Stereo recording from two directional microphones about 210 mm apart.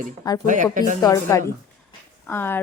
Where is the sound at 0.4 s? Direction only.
40° right (ahead or behind).